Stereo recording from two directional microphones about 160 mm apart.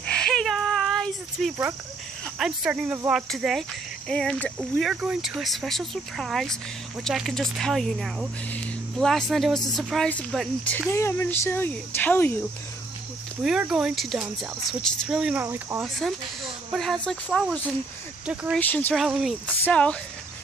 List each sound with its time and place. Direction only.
0.0 s a sound: 5° left (ahead or behind)
2.3 s speech: 5° right (ahead or behind)
10.9 s speech: 15° left (ahead or behind)
13.4 s speech: 5° right (ahead or behind)
15.4 s speech: 20° right (ahead or behind)
15.8 s speech: centre (ahead or behind)
18.6 s speech: 10° left (ahead or behind)
18.9 s speech: centre (ahead or behind)
19.6 s speech: 5° left (ahead or behind)